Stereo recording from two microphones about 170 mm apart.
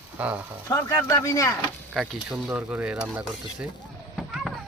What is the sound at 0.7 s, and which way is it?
Speech, 15° left (ahead or behind).